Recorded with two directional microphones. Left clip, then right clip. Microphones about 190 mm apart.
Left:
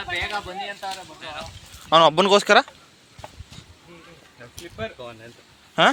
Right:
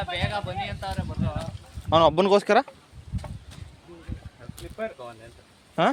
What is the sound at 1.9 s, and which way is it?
Speech, 10° right (ahead or behind).